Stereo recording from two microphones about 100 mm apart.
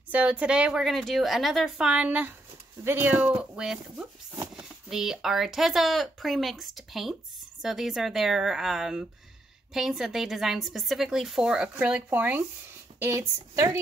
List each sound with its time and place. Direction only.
0.1 s speech: 15° right (ahead or behind)
1.9 s speech: 10° right (ahead or behind)
13.2 s a woman's voice: 35° right (ahead or behind)